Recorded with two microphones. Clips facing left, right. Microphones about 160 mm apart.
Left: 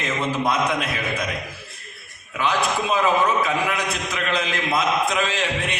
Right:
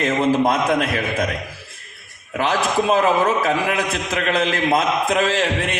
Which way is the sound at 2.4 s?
45° right (ahead or behind).